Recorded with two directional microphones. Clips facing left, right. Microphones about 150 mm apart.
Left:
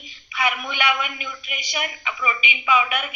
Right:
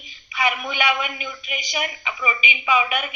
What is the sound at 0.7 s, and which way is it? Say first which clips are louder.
A woman's voice: right 1 dB; centre (ahead or behind).